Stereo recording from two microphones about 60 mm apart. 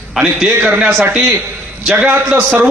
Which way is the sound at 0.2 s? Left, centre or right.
Centre.